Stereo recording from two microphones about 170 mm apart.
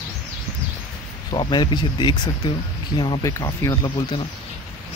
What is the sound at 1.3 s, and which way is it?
Speech, 25° left (ahead or behind).